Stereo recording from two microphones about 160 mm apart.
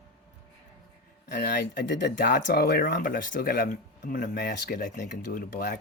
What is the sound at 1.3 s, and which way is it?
Speech, 90° left.